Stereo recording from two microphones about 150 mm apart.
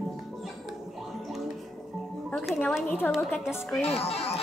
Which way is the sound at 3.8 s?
40° left (ahead or behind).